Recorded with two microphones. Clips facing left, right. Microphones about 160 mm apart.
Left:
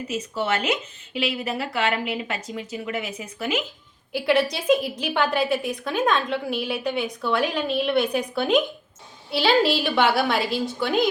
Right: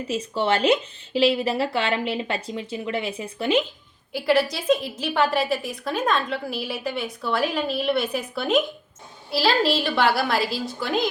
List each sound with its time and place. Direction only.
0.1 s a woman's voice: 30° right (ahead or behind)
4.1 s a woman's voice: centre (ahead or behind)